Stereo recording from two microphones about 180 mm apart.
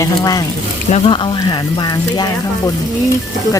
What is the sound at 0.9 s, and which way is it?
Speech, 35° left (ahead or behind).